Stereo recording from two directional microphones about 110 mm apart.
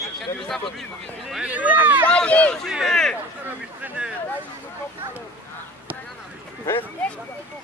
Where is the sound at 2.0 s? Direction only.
10° left (ahead or behind).